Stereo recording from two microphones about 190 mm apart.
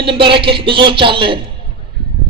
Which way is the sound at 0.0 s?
25° right (ahead or behind).